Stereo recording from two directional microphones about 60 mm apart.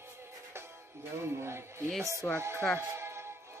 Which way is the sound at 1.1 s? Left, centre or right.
Right.